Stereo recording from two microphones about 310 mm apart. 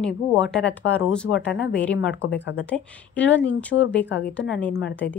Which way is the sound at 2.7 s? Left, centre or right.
Centre.